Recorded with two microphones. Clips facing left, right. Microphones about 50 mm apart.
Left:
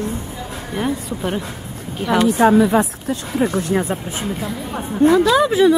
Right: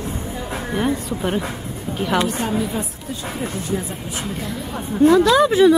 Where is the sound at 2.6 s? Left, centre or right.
Left.